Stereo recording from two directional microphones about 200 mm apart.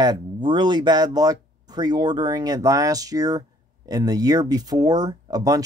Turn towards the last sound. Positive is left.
turn(degrees=-20)  # may be behind; listen again after turning